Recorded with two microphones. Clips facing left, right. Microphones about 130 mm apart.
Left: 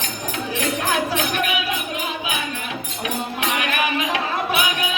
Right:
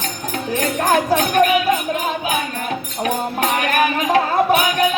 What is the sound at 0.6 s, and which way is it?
Music, 45° right (ahead or behind).